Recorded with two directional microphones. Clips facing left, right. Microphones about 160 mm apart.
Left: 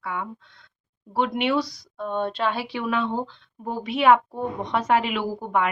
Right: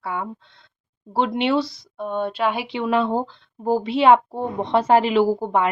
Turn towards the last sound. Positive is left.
turn(degrees=-30)  # may be behind; listen again after turning